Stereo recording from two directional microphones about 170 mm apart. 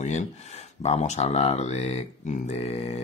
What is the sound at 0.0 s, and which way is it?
Speech, 40° left (ahead or behind).